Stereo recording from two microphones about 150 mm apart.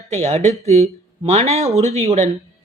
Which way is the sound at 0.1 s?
50° right (ahead or behind).